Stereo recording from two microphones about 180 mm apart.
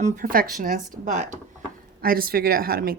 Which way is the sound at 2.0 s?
55° right (ahead or behind).